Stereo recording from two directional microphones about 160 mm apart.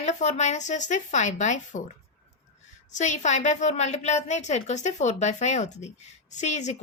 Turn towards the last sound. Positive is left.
turn(degrees=45)  # may be behind; listen again after turning